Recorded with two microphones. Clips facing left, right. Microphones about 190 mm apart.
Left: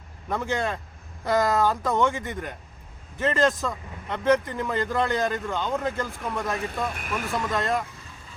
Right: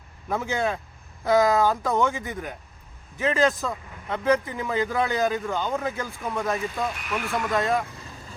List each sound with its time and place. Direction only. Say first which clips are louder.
0.3 s speech: right 1 dB; 5° right (ahead or behind)
6.9 s speech: even; 45° left (ahead or behind)
7.5 s speech: right 3 dB; centre (ahead or behind)